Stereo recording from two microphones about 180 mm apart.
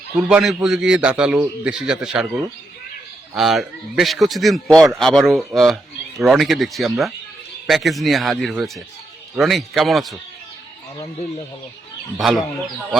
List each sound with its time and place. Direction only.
0.2 s a man's voice: 5° right (ahead or behind)
3.3 s a man's voice: centre (ahead or behind)
12.1 s a man's voice: centre (ahead or behind)